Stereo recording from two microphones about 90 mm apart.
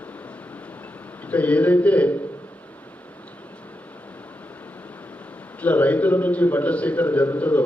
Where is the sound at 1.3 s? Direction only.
15° left (ahead or behind).